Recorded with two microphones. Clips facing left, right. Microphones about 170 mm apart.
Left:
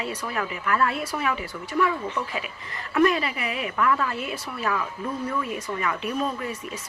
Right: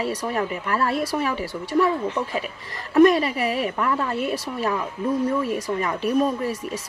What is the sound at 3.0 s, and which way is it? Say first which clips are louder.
Speech: right 6 dB; 40° right (ahead or behind).